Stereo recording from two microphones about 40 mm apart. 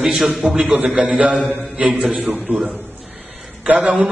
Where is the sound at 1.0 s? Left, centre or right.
Right.